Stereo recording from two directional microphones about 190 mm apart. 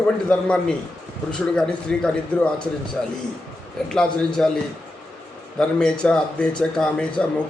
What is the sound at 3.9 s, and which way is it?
Speech, 5° left (ahead or behind).